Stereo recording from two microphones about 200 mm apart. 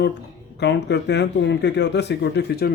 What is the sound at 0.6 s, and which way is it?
Speech, 60° left (ahead or behind).